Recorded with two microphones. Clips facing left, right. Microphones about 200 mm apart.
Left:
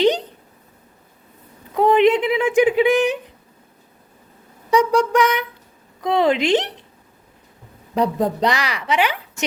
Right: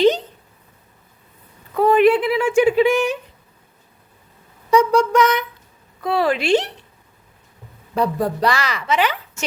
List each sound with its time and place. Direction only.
1.7 s speech: 20° left (ahead or behind)
4.7 s a woman's voice: 15° left (ahead or behind)
7.9 s a woman's voice: 20° left (ahead or behind)